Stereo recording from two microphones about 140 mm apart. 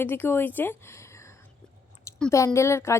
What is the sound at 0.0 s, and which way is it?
Speech, 15° left (ahead or behind).